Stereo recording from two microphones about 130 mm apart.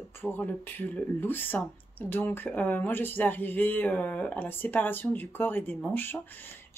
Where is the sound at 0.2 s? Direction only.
15° left (ahead or behind).